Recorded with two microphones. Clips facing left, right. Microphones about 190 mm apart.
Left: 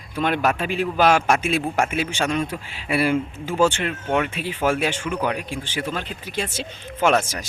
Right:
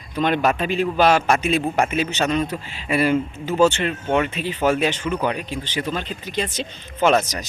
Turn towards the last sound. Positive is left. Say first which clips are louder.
# right 2 dB
turn(degrees=10)  # may be behind; listen again after turning